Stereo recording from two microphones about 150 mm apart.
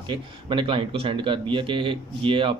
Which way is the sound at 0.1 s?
30° right (ahead or behind).